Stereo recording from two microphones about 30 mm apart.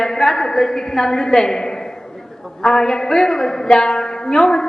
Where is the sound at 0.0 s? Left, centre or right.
Centre.